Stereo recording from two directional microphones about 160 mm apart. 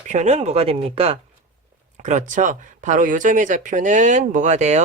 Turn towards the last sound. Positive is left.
turn(degrees=-50)  # may be behind; listen again after turning